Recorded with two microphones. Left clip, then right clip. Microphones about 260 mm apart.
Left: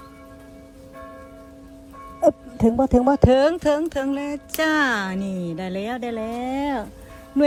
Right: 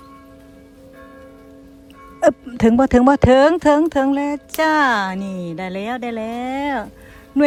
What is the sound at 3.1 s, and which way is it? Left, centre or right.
Speech, right.